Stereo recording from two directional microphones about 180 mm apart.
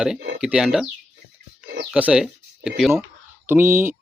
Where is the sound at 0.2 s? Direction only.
65° right (ahead or behind).